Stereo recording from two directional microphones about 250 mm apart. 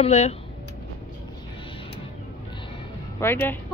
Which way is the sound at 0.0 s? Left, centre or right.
Left.